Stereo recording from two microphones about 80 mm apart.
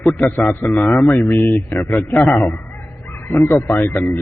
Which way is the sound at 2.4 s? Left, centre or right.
Left.